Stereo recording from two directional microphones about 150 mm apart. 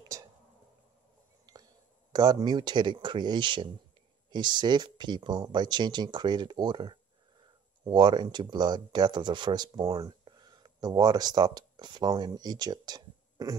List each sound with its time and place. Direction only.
0.1 s a sound: 20° right (ahead or behind)
1.4 s whispering: 25° right (ahead or behind)
2.1 s speech: 30° right (ahead or behind)